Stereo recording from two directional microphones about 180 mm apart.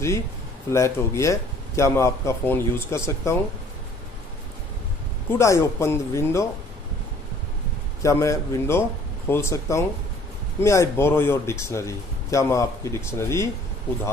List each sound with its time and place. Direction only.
0.7 s speech: 15° left (ahead or behind)
5.3 s speech: 15° left (ahead or behind)
8.0 s speech: 15° left (ahead or behind)